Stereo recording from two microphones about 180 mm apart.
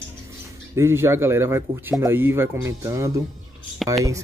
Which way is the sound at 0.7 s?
15° right (ahead or behind).